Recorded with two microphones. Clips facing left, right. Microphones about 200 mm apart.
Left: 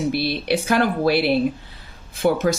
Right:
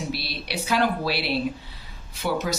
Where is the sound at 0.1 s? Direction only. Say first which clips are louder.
Left 10 dB; 50° left (ahead or behind).